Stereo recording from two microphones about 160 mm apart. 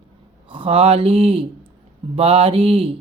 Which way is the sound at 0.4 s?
35° right (ahead or behind).